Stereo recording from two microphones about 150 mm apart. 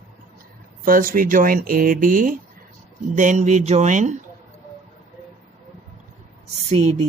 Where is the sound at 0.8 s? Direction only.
70° right (ahead or behind).